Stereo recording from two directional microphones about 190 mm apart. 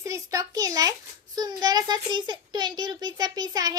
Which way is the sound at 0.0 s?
15° right (ahead or behind).